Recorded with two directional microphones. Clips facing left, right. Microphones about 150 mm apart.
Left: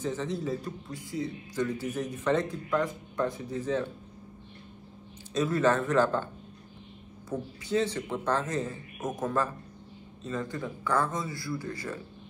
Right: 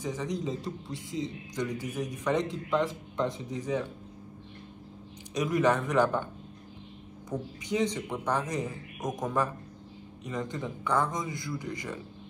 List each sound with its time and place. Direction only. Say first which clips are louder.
0.0 s a man's voice: left 1 dB; 15° right (ahead or behind)
5.3 s a man's voice: left 1 dB; 15° right (ahead or behind)
7.2 s a man's voice: even; 15° right (ahead or behind)